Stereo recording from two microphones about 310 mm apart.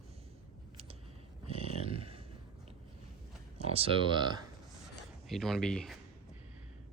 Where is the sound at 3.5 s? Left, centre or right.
Centre.